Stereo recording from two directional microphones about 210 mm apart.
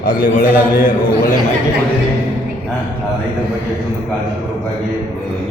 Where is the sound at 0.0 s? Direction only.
40° left (ahead or behind).